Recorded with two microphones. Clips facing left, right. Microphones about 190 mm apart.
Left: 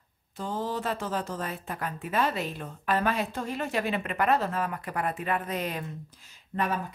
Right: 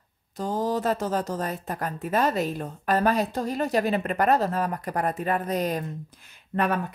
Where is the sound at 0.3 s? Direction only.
40° right (ahead or behind).